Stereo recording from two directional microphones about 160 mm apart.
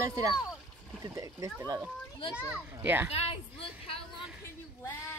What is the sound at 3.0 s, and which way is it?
Speech, 40° left (ahead or behind).